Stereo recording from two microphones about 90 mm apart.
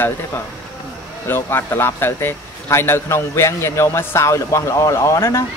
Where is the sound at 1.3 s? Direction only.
25° left (ahead or behind).